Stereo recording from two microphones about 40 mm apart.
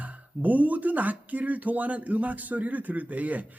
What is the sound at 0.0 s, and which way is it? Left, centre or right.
Speech, right.